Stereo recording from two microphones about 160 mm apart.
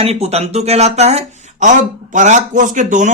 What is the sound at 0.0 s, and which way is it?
A man's voice, 40° right (ahead or behind).